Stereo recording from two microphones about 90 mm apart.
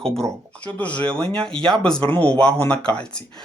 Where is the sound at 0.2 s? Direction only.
15° left (ahead or behind).